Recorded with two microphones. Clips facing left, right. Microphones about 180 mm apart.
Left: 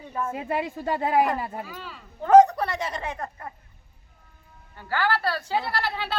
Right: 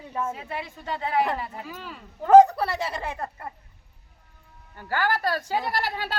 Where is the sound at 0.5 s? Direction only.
40° left (ahead or behind).